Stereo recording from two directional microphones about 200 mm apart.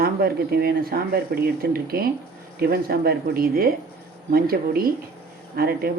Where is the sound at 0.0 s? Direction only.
50° right (ahead or behind).